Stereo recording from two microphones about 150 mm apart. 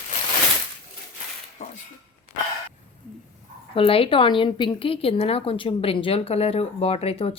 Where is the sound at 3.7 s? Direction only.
35° left (ahead or behind).